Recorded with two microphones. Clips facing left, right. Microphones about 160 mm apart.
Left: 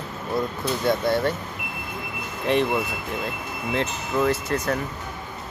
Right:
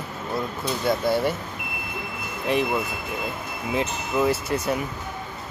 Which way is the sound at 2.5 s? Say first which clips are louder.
Left 2 dB; centre (ahead or behind).